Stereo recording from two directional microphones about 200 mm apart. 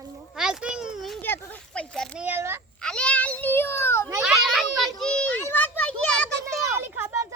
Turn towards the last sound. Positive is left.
turn(degrees=-10)  # may be behind; listen again after turning